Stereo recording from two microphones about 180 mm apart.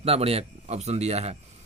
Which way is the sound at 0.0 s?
35° right (ahead or behind).